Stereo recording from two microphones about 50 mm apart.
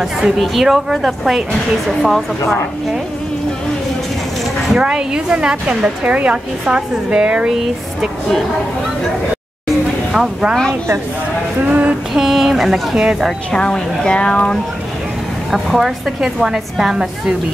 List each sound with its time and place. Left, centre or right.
0.4 s a woman's voice: centre
4.7 s a woman's voice: centre
10.1 s a woman's voice: centre
11.6 s a woman's voice: right
12.1 s a sound: centre
12.9 s a woman's voice: centre
13.5 s speech: centre
15.5 s a woman's voice: centre